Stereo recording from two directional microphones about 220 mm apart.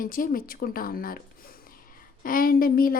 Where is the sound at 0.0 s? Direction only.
40° left (ahead or behind).